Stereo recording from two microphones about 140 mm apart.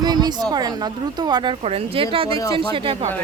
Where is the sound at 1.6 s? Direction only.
45° right (ahead or behind).